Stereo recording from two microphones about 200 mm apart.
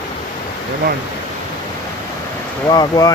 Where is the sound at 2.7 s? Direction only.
20° left (ahead or behind).